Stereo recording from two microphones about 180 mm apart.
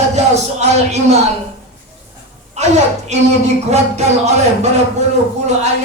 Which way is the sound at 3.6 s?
40° right (ahead or behind).